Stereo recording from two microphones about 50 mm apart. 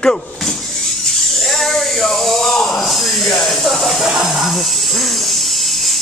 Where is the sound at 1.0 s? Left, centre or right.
Centre.